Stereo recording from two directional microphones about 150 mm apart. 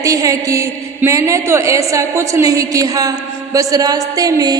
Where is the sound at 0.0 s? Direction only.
20° right (ahead or behind).